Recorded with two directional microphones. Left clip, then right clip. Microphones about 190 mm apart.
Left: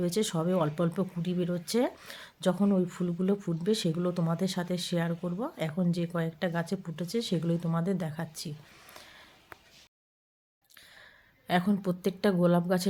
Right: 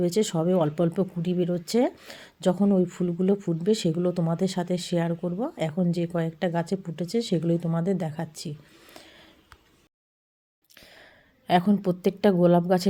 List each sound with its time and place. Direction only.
0.0 s speech: 10° right (ahead or behind)
10.8 s a woman's voice: 10° right (ahead or behind)